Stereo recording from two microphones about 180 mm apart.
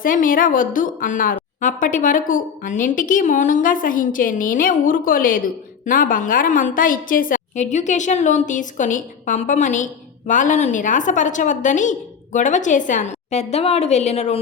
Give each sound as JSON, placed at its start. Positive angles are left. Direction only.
{"t": 0.0, "sound": "a woman's voice", "side_deg": 50}